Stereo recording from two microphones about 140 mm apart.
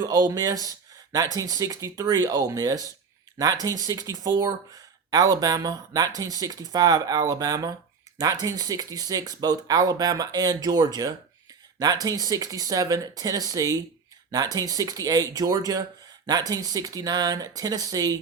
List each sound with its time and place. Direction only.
0.0 s speech: 30° right (ahead or behind)